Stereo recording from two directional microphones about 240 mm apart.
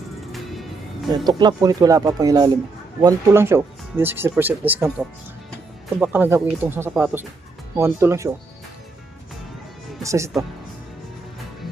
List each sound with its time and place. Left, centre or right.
0.3 s music: centre
1.1 s speech: centre
10.0 s speech: centre